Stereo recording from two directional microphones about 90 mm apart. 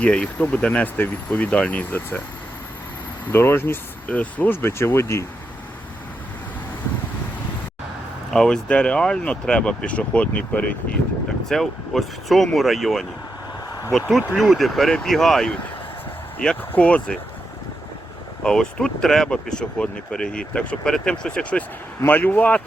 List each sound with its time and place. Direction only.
0.0 s speech: 15° left (ahead or behind)
3.3 s speech: 25° left (ahead or behind)
8.3 s speech: 5° left (ahead or behind)
11.4 s speech: 5° left (ahead or behind)
14.3 s speech: centre (ahead or behind)
18.4 s speech: 5° left (ahead or behind)
22.0 s speech: 25° left (ahead or behind)